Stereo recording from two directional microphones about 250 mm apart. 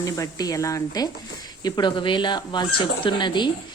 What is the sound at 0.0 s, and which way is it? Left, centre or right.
A woman's voice, centre.